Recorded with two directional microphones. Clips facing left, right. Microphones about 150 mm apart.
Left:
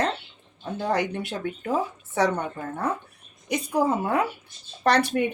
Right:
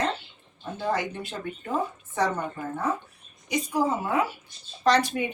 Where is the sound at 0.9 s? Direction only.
70° left (ahead or behind).